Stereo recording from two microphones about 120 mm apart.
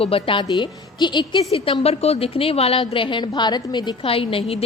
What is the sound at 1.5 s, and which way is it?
A woman's voice, 50° left (ahead or behind).